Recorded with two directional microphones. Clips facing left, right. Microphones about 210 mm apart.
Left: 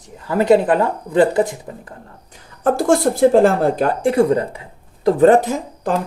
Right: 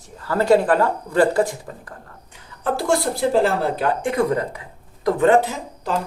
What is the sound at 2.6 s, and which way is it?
Speech, 50° left (ahead or behind).